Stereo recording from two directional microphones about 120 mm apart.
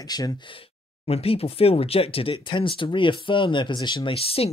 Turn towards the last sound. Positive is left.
turn(degrees=55)  # may be behind; listen again after turning